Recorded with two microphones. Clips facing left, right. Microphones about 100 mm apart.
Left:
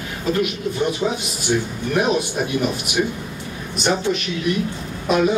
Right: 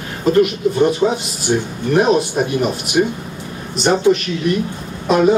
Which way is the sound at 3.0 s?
35° right (ahead or behind).